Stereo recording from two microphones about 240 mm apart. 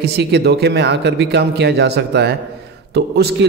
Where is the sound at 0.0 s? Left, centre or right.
Right.